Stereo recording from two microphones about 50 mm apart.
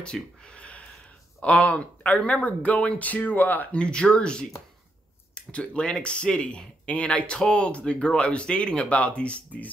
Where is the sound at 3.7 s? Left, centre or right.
Left.